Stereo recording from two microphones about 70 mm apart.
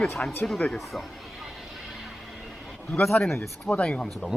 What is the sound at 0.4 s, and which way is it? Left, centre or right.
Speech, centre.